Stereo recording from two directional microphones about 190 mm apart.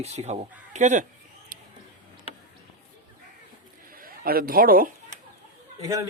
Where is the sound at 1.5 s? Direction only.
50° right (ahead or behind).